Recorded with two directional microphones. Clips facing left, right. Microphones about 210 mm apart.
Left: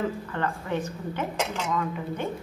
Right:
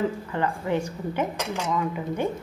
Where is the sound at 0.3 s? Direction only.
15° right (ahead or behind).